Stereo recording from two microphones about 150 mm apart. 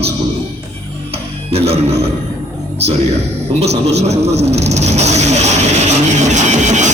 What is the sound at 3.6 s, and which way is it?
Speech, 45° right (ahead or behind).